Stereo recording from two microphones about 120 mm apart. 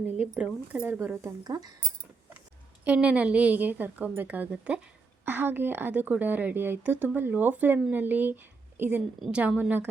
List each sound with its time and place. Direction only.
0.2 s a woman's voice: 10° right (ahead or behind)
0.9 s speech: 20° right (ahead or behind)
1.5 s speech: 35° right (ahead or behind)
2.8 s a woman's voice: 10° right (ahead or behind)